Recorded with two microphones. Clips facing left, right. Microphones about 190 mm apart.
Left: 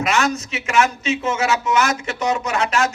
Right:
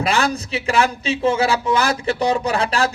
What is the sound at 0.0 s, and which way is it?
A man's voice, 35° right (ahead or behind).